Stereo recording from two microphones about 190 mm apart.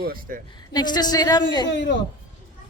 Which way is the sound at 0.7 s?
20° left (ahead or behind).